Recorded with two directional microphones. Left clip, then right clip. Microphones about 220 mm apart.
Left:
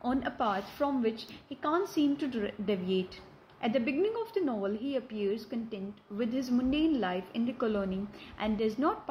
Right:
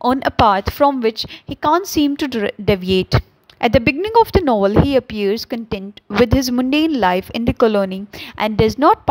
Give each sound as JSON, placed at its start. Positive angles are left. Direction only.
{"t": 0.0, "sound": "a woman's voice", "side_deg": -50}